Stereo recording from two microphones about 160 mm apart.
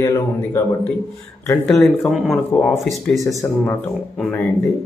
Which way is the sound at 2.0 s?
Centre (ahead or behind).